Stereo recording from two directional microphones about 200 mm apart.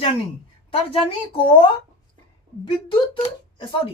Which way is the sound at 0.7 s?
30° left (ahead or behind).